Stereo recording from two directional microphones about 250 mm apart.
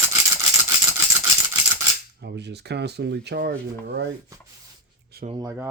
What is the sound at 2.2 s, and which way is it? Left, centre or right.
Speech, right.